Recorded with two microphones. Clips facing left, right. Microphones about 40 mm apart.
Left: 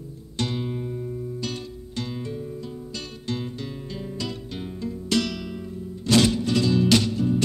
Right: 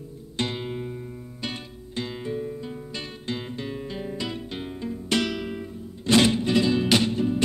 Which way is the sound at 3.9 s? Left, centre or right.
Right.